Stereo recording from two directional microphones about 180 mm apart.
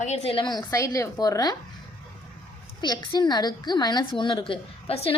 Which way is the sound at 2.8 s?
25° left (ahead or behind).